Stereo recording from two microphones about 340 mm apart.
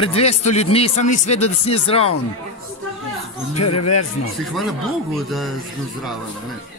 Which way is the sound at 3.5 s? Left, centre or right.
Left.